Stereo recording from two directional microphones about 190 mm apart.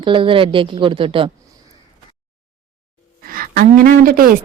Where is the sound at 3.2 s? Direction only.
50° right (ahead or behind).